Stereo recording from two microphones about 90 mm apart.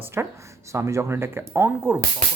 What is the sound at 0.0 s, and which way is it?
Speech, 30° right (ahead or behind).